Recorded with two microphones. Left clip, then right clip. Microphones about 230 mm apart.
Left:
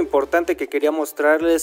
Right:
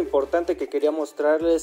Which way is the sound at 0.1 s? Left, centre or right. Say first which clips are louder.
Left 2 dB; left.